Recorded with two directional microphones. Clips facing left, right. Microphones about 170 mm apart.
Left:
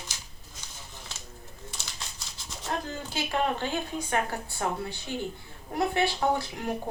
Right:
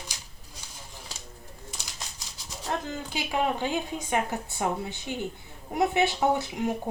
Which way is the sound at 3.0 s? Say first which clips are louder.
Even; 15° right (ahead or behind).